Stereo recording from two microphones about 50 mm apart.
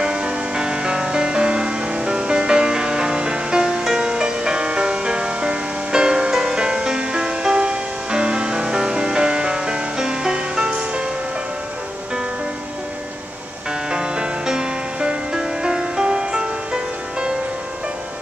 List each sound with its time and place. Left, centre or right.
0.0 s music: centre
13.8 s music: centre